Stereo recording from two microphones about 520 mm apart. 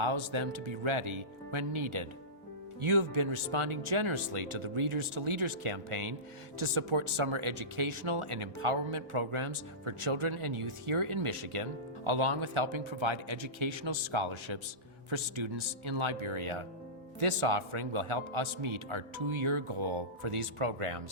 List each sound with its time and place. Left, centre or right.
0.0 s a man's voice: right